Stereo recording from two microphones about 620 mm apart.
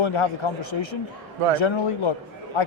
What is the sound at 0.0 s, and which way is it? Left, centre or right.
Speech, left.